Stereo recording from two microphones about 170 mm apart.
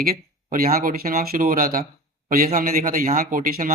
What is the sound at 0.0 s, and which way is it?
Speech, 60° right (ahead or behind).